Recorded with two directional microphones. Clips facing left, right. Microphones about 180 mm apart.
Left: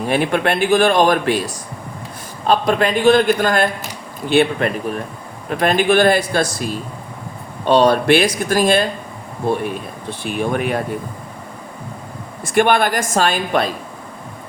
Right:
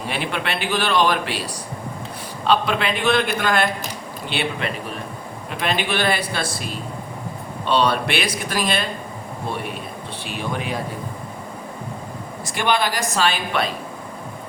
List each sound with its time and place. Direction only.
0.1 s a man's voice: 50° left (ahead or behind)
10.2 s speech: 50° left (ahead or behind)
12.5 s speech: 55° left (ahead or behind)